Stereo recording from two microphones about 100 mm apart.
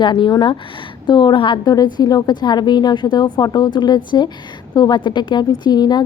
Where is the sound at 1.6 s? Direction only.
40° left (ahead or behind).